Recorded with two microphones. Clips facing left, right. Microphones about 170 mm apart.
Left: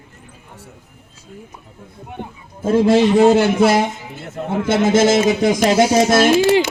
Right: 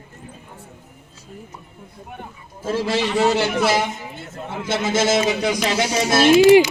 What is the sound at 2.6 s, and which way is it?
A man's voice, 55° left (ahead or behind).